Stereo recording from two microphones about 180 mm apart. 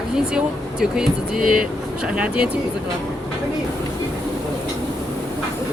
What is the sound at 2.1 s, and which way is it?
Speech, 5° right (ahead or behind).